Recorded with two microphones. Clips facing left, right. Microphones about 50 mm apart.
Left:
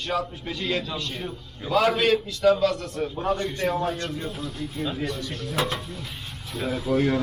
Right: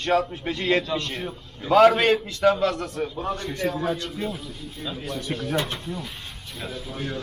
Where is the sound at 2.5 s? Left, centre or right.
Right.